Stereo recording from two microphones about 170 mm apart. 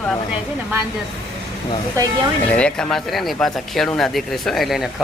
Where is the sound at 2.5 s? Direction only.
5° left (ahead or behind).